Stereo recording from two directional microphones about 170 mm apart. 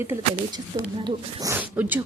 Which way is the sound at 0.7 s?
30° right (ahead or behind).